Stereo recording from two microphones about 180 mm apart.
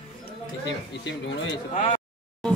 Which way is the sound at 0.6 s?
80° left.